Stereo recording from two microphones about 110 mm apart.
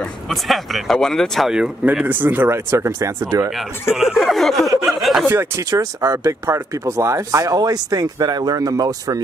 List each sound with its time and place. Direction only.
0.3 s speech: centre (ahead or behind); by 3.5 s 30° right (ahead or behind)
3.9 s speech: 5° right (ahead or behind)
5.2 s speech: 20° right (ahead or behind)
5.7 s speech: 35° right (ahead or behind)